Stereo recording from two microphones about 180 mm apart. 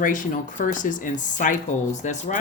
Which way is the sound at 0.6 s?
45° left (ahead or behind).